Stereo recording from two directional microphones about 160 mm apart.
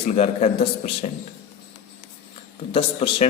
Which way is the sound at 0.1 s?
40° left (ahead or behind).